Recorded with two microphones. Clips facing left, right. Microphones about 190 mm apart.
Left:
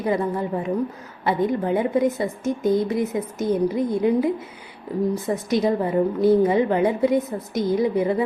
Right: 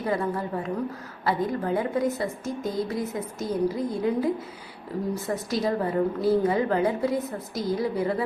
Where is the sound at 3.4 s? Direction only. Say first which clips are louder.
Left 7 dB; centre (ahead or behind).